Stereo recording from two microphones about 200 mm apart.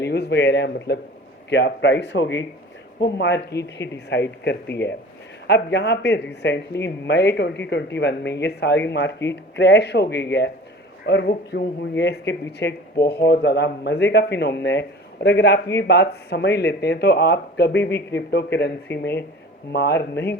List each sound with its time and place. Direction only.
0.0 s speech: 55° left (ahead or behind)